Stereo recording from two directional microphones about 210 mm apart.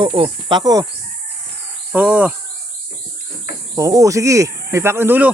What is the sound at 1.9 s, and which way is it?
Insect, 5° right (ahead or behind).